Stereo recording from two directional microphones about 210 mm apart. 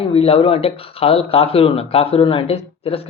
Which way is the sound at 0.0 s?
30° left (ahead or behind).